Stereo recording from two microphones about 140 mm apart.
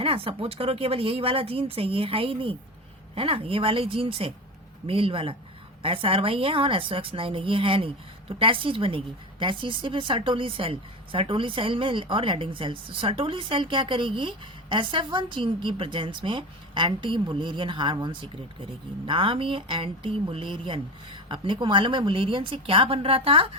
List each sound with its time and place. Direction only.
0.0 s speech: 40° right (ahead or behind)